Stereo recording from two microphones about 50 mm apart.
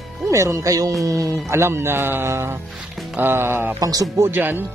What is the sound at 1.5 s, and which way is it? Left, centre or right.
A man's voice, right.